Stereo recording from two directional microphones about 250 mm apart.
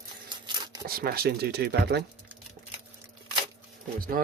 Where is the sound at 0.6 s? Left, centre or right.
Centre.